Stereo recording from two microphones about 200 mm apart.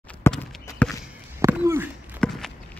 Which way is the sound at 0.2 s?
10° left (ahead or behind).